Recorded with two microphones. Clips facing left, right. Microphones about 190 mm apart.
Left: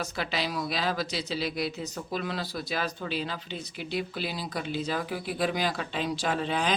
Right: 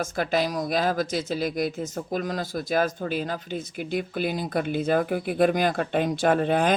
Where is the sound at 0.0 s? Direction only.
50° right (ahead or behind).